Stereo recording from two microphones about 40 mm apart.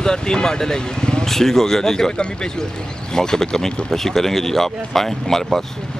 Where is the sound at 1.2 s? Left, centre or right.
Centre.